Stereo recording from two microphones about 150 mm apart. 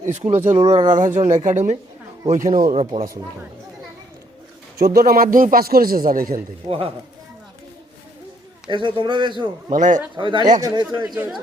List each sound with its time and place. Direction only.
0.0 s speech: 50° right (ahead or behind)
0.9 s a woman's voice: 60° right (ahead or behind)
4.8 s a man's voice: 90° right; by 6.4 s 70° right (ahead or behind)
6.7 s a man's voice: 40° right (ahead or behind)
8.7 s a man's voice: 30° right (ahead or behind)
9.6 s a woman's voice: 55° right (ahead or behind)
10.2 s a man's voice: 30° right (ahead or behind)